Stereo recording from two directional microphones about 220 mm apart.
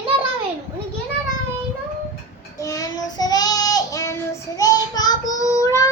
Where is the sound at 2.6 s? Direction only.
15° left (ahead or behind).